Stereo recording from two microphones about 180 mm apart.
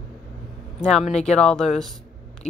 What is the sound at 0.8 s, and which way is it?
A woman's voice, 5° left (ahead or behind).